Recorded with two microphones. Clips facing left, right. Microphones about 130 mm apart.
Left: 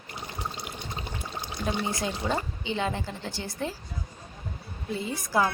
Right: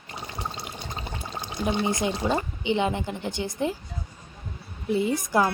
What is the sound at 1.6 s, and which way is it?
Speech, 20° right (ahead or behind).